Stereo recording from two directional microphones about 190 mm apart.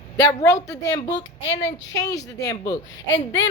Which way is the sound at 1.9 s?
20° left (ahead or behind).